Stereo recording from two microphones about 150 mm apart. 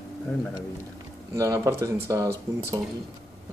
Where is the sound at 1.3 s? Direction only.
20° right (ahead or behind).